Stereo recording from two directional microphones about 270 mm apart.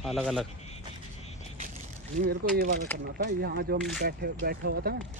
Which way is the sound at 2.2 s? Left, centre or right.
Right.